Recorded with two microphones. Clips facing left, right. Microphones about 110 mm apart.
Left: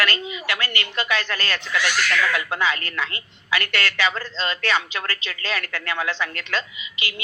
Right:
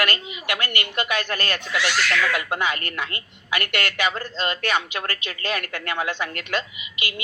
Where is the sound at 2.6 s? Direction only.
50° right (ahead or behind).